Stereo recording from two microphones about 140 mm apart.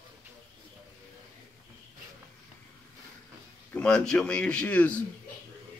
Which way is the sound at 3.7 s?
5° left (ahead or behind).